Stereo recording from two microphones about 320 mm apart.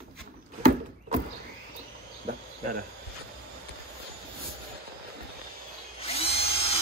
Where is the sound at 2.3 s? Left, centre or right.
Right.